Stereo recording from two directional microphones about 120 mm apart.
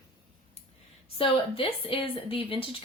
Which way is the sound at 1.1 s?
50° left (ahead or behind).